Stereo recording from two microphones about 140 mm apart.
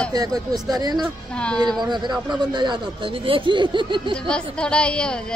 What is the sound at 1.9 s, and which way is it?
Speech, 30° right (ahead or behind).